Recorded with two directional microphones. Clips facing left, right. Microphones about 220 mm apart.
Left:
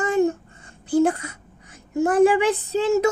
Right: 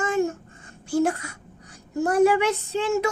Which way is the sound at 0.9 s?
30° left (ahead or behind).